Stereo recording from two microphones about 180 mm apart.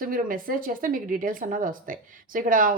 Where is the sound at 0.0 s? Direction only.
50° right (ahead or behind).